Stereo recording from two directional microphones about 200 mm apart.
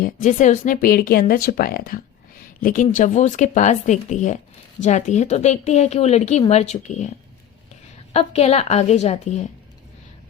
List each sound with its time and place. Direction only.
0.0 s a woman's voice: 40° left (ahead or behind)
8.1 s a woman's voice: 30° left (ahead or behind)